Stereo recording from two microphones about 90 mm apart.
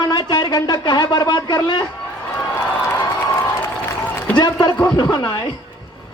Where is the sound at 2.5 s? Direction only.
25° left (ahead or behind).